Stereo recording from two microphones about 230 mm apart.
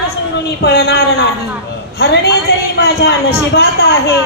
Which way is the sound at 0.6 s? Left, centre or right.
Left.